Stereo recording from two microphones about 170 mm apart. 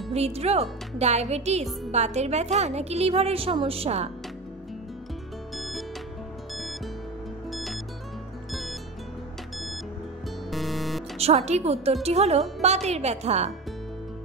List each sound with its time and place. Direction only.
0.1 s speech: 35° right (ahead or behind)
5.6 s music: centre (ahead or behind)
7.5 s music: centre (ahead or behind)
10.5 s music: centre (ahead or behind)
11.1 s speech: 40° right (ahead or behind)